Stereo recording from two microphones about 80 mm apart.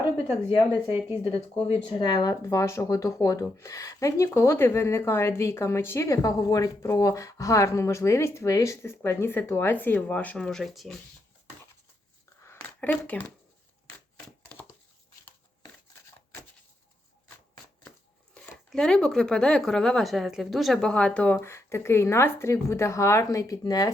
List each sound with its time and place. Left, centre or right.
0.3 s a woman's voice: right
2.0 s speech: left
2.4 s speech: left; by 10.3 s centre
10.3 s speech: centre
12.4 s a sound: left
18.5 s speech: centre
20.9 s speech: centre
21.3 s speech: left